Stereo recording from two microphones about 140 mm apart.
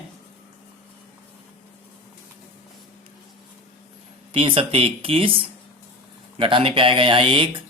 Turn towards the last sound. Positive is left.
turn(degrees=-40)  # may be behind; listen again after turning